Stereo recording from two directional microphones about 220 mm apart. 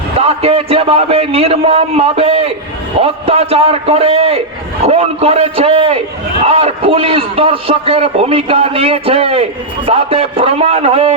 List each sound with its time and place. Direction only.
0.2 s a man's voice: 25° right (ahead or behind)